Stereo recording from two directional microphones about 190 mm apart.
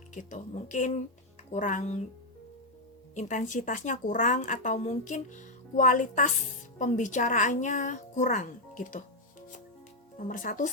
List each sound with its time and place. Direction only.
0.1 s a woman's voice: 40° left (ahead or behind)
3.2 s a woman's voice: 40° left (ahead or behind)
10.2 s speech: 45° left (ahead or behind)